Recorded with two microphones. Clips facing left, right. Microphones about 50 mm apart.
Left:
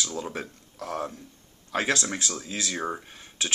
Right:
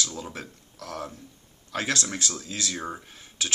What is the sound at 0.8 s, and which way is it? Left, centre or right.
A man's voice, centre.